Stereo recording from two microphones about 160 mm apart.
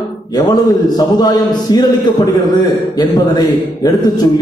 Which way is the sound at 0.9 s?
25° left (ahead or behind).